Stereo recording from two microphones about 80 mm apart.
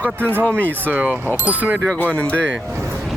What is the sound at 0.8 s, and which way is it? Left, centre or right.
Speech, centre.